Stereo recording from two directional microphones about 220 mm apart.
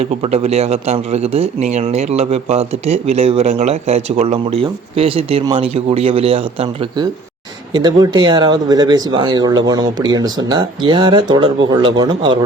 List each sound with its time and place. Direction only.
0.0 s speech: 25° right (ahead or behind)